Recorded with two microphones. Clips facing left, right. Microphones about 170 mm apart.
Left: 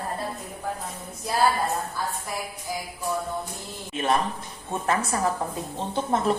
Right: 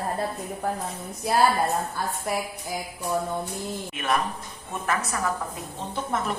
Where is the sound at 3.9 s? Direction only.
30° left (ahead or behind).